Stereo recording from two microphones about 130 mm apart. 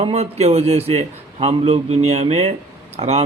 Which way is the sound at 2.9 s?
55° right (ahead or behind).